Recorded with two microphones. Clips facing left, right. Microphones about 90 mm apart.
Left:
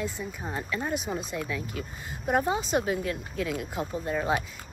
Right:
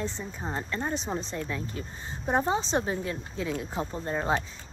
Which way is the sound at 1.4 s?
30° right (ahead or behind).